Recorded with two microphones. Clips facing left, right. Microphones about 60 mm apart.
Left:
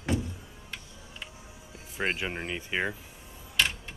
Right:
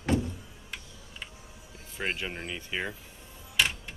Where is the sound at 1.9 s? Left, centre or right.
Centre.